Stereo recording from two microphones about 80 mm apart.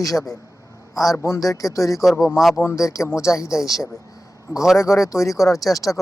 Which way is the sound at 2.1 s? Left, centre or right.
Centre.